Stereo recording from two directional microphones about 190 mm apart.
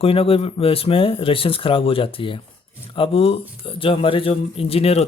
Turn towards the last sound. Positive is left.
turn(degrees=30)  # may be behind; listen again after turning